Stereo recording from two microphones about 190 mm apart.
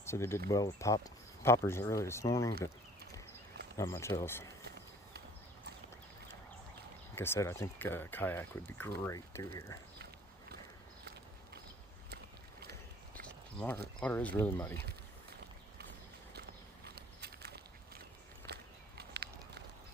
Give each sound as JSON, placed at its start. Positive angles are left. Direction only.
{"t": 0.0, "sound": "speech", "side_deg": 15}
{"t": 3.8, "sound": "speech", "side_deg": 15}
{"t": 7.2, "sound": "speech", "side_deg": 15}
{"t": 13.2, "sound": "a sound", "side_deg": 5}
{"t": 14.0, "sound": "speech", "side_deg": 10}
{"t": 16.8, "sound": "a sound", "side_deg": -60}
{"t": 18.4, "sound": "walk", "side_deg": -60}